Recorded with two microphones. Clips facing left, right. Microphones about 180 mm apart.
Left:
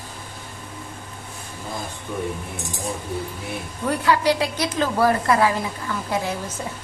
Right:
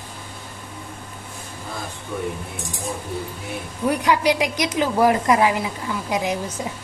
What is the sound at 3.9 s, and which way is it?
A woman's voice, 15° right (ahead or behind).